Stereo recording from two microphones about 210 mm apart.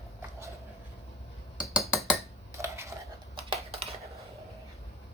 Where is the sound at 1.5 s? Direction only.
Centre (ahead or behind).